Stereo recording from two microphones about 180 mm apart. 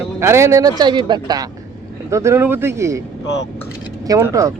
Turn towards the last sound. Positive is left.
turn(degrees=-15)  # may be behind; listen again after turning